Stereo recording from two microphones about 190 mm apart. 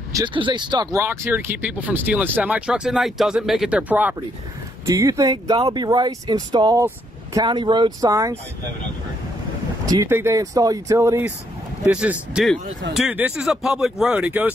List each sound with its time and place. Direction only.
0.1 s speech: 25° right (ahead or behind)
1.0 s speech: 15° right (ahead or behind)
9.8 s speech: 15° right (ahead or behind)